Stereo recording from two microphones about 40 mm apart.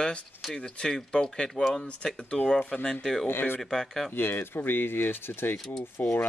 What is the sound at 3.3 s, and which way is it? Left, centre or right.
Speech, left.